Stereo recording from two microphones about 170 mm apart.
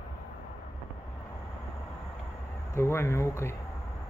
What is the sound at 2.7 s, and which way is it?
Speech, 15° left (ahead or behind).